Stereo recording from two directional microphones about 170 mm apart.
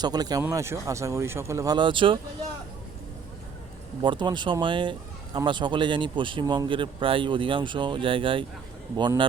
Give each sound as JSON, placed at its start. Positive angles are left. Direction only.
{"t": 0.0, "sound": "speech", "side_deg": -25}
{"t": 4.0, "sound": "speech", "side_deg": -25}